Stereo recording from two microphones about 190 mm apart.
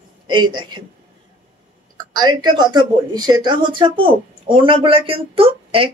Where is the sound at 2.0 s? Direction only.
20° right (ahead or behind).